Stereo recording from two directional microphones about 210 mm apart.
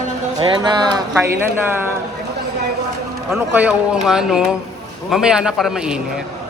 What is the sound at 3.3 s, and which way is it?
Speech, 10° right (ahead or behind).